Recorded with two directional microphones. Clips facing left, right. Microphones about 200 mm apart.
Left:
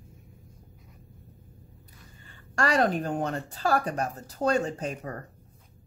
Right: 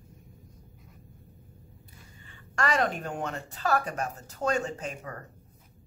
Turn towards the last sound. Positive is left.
turn(degrees=35)  # may be behind; listen again after turning